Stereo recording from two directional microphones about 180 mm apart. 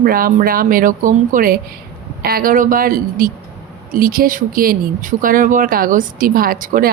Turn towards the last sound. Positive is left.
turn(degrees=-50)  # may be behind; listen again after turning